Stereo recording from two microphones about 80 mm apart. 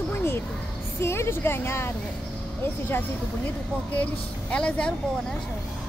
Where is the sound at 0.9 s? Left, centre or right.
Left.